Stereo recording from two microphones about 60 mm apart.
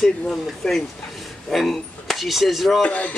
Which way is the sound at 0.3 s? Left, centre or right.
Centre.